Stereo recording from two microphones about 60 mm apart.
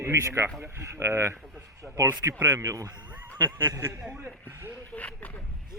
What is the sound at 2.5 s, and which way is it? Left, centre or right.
Speech, right.